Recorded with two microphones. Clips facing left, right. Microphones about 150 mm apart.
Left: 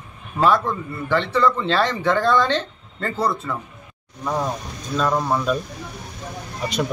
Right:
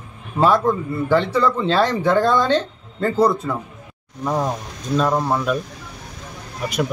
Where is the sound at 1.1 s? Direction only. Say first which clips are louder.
Right 1 dB; 10° right (ahead or behind).